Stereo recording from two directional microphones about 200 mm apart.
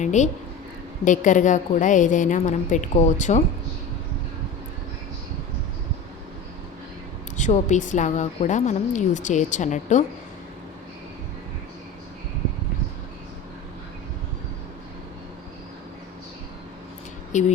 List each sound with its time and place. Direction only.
0.0 s a woman's voice: 35° left (ahead or behind)
7.3 s a woman's voice: 35° left (ahead or behind)
17.3 s a woman's voice: 40° left (ahead or behind)